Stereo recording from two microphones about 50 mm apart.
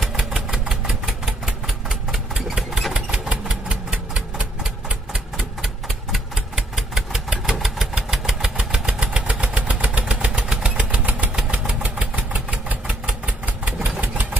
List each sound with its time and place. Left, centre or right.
0.0 s engine: centre; by 11.2 s right
11.5 s vehicle: right